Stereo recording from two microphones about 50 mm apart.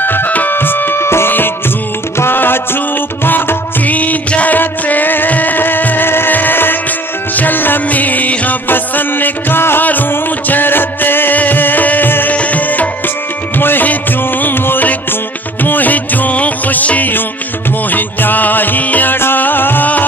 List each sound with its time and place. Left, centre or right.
0.0 s music: left
13.6 s music: left
19.1 s music: left